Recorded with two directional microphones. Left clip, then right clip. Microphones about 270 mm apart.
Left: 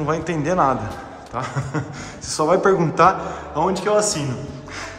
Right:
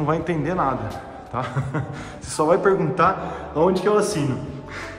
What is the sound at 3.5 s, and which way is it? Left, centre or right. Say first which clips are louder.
Speech: even; centre.